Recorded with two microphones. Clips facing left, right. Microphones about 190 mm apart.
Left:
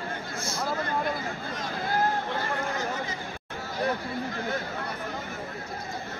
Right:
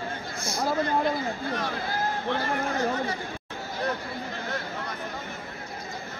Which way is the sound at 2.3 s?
60° right (ahead or behind).